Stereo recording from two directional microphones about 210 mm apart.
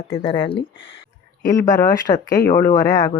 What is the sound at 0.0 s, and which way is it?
Speech, 25° left (ahead or behind).